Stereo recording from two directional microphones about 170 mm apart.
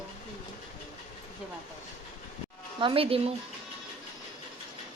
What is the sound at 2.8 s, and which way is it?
Speech, 30° right (ahead or behind).